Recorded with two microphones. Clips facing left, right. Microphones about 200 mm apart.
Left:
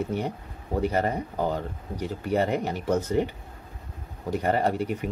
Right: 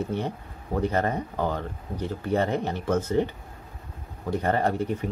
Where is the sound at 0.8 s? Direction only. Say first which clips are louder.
Even; 10° left (ahead or behind).